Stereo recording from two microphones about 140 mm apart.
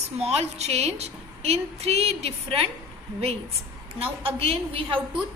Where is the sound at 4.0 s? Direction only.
45° right (ahead or behind).